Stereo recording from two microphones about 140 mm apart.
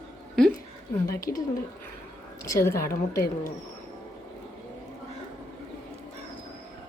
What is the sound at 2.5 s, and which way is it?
Speech, 20° left (ahead or behind).